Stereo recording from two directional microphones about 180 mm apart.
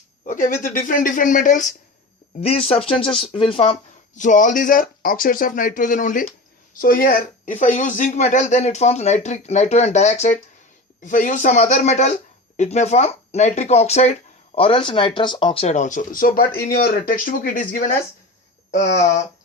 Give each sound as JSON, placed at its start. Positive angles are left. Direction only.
{"t": 0.3, "sound": "speech", "side_deg": 45}
{"t": 2.4, "sound": "speech", "side_deg": 35}